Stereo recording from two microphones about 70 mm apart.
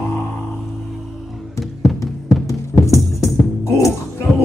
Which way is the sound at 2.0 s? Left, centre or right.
Left.